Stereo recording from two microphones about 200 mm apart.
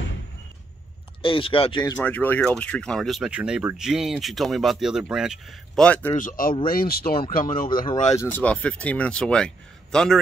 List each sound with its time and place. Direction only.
1.2 s speech: 25° left (ahead or behind)
1.8 s speech: 10° left (ahead or behind)
6.1 s speech: 45° left (ahead or behind)
8.2 s speech: 10° left (ahead or behind)